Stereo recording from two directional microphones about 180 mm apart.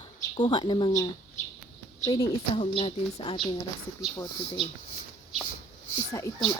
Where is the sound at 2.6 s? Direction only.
30° left (ahead or behind).